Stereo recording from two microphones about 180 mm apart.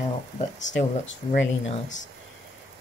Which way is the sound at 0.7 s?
85° left.